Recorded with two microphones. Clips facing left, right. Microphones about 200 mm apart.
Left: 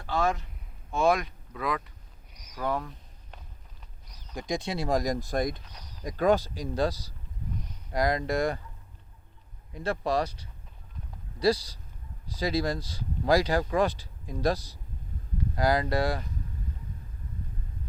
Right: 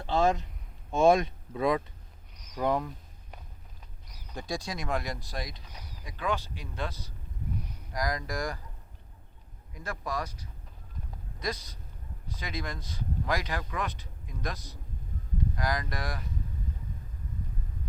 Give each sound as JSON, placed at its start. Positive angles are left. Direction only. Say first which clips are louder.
{"t": 0.0, "sound": "a man's voice", "louder": "right 2 dB", "side_deg": -25}
{"t": 4.4, "sound": "speech", "louder": "left 4 dB", "side_deg": 20}
{"t": 9.7, "sound": "speech", "louder": "left 8 dB", "side_deg": 30}
{"t": 11.3, "sound": "speech", "louder": "left 11 dB", "side_deg": 30}